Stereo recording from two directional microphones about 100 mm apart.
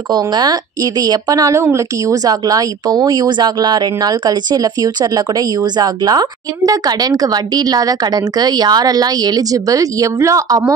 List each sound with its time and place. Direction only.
0.1 s speech: 45° right (ahead or behind)